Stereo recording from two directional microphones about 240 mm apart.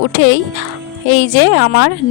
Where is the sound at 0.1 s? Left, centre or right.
Left.